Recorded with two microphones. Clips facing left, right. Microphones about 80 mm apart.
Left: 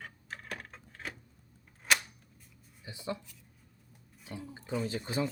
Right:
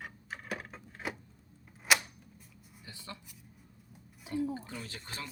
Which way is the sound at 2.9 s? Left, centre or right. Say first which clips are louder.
Left 9 dB; centre.